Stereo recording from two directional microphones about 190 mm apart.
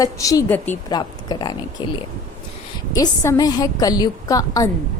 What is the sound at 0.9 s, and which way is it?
Speech, 20° left (ahead or behind).